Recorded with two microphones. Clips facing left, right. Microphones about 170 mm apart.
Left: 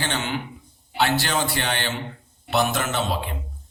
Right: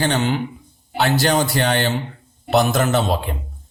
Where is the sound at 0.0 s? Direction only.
40° right (ahead or behind).